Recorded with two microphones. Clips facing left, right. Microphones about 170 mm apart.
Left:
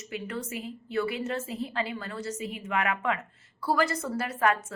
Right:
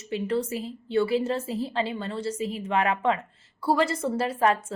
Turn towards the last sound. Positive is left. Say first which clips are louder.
# right 3 dB
turn(degrees=-30)  # may be behind; listen again after turning